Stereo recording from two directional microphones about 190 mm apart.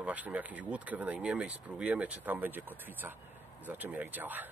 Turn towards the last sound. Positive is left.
turn(degrees=-10)  # may be behind; listen again after turning